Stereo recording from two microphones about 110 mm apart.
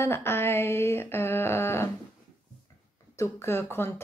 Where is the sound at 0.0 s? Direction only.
20° left (ahead or behind).